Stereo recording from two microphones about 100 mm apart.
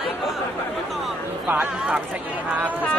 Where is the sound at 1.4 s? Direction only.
15° right (ahead or behind).